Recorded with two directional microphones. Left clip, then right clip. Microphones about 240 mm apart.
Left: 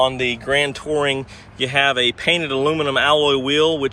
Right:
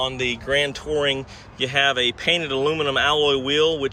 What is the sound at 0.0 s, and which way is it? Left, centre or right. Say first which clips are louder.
Speech: left 6 dB; centre.